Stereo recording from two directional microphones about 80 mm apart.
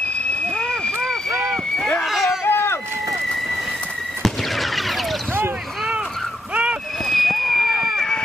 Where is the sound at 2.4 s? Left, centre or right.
Left.